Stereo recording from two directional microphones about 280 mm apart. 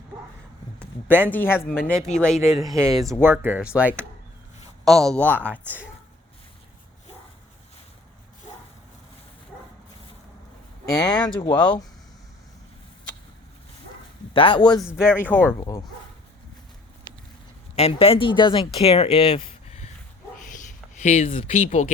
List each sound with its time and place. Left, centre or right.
1.0 s speech: centre
1.3 s speech: centre
2.7 s speech: centre
5.0 s speech: centre
10.8 s speech: centre
14.3 s speech: centre
17.7 s speech: left